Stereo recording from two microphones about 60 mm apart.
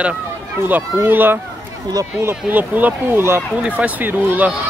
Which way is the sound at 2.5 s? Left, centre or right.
Right.